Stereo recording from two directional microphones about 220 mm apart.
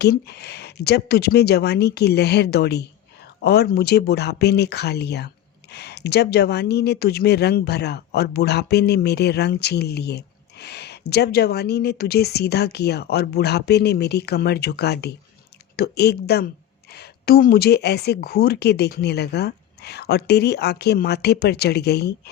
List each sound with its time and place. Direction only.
0.0 s speech: 50° left (ahead or behind)